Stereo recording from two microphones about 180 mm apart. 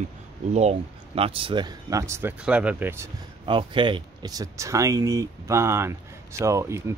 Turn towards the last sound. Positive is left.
turn(degrees=-15)  # may be behind; listen again after turning